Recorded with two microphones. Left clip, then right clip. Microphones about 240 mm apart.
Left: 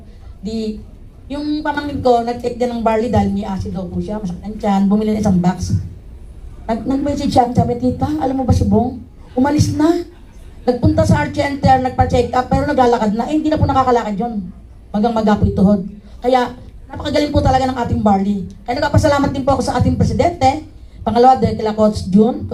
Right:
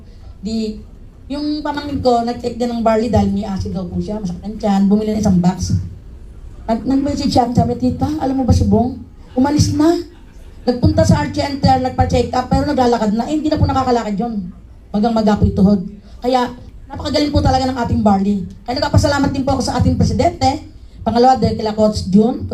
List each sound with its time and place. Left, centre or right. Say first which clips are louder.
0.4 s speech: even; right